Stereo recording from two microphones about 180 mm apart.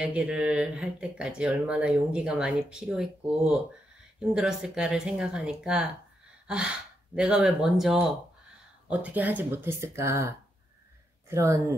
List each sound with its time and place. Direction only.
0.0 s speech: 5° right (ahead or behind)
6.4 s gasp: 5° right (ahead or behind)
7.2 s speech: 5° right (ahead or behind)